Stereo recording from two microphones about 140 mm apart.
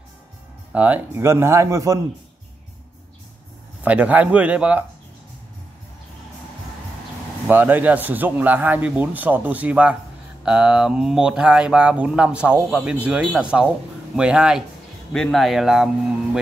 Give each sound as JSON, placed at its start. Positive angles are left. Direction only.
{"t": 0.7, "sound": "speech", "side_deg": -10}
{"t": 3.8, "sound": "speech", "side_deg": -10}
{"t": 7.4, "sound": "speech", "side_deg": -15}